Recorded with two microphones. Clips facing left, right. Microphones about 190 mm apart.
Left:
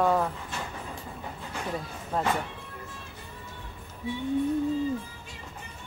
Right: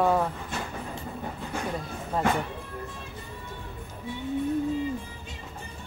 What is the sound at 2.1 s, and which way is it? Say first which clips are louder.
Speech: right 2 dB; centre (ahead or behind).